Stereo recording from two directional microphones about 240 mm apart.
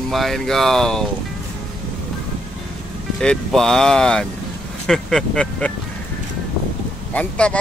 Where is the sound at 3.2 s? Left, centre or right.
Centre.